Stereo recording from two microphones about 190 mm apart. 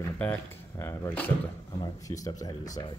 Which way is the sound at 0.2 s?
10° left (ahead or behind).